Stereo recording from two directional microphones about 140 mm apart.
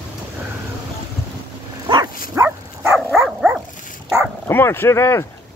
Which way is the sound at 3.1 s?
5° right (ahead or behind).